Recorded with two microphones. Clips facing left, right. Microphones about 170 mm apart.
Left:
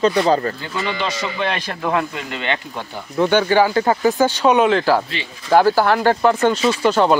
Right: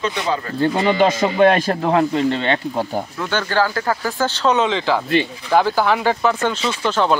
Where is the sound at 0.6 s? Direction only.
45° right (ahead or behind).